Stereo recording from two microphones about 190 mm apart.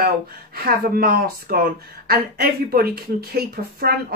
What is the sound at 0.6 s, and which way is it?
Speech, 50° right (ahead or behind).